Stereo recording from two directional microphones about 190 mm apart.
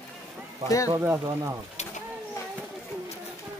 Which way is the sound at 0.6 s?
15° left (ahead or behind).